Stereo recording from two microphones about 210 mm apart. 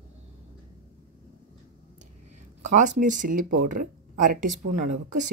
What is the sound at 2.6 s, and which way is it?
Speech, 35° right (ahead or behind).